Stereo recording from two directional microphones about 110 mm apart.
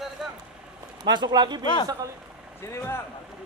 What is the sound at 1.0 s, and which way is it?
Speech, 40° right (ahead or behind).